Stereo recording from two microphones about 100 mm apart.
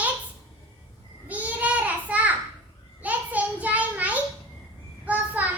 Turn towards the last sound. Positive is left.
turn(degrees=-15)  # may be behind; listen again after turning